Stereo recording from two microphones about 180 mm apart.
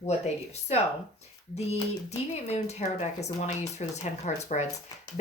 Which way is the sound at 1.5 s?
35° left (ahead or behind).